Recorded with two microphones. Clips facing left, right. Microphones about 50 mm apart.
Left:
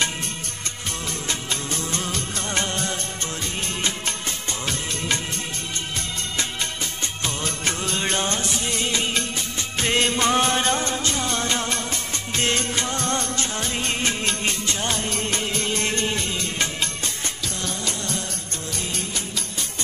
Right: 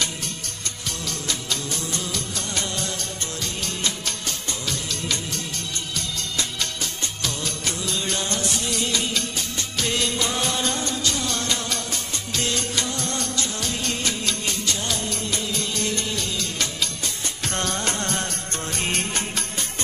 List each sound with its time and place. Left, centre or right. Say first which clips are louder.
1.0 s music of bollywood: even; left
5.9 s music: even; left
17.4 s music of bollywood: right 7 dB; right
18.7 s music: right 4 dB; right